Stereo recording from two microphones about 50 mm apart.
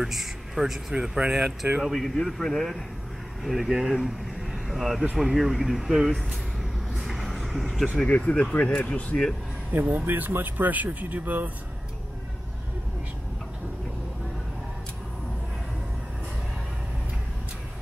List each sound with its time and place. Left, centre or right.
0.0 s speech: centre
1.8 s speech: centre
3.4 s speech: centre
7.1 s vehicle: centre
7.7 s speech: centre
8.1 s speech: left
9.7 s speech: right